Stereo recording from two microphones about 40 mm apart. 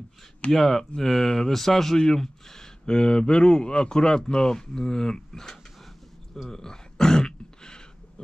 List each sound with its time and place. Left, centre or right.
0.5 s speech: centre
6.5 s throat clearing: centre